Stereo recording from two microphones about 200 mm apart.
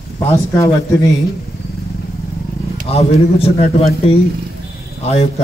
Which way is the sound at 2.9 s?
30° left (ahead or behind).